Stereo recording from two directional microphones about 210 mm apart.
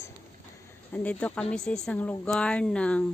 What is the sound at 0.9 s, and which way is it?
Speech, 5° left (ahead or behind).